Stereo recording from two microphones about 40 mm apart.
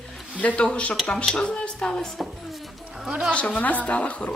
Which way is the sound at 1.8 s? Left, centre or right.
Centre.